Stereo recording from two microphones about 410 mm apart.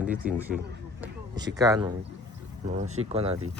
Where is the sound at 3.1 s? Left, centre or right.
Centre.